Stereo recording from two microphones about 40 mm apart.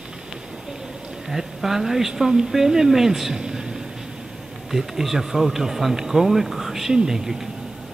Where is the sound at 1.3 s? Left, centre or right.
Centre.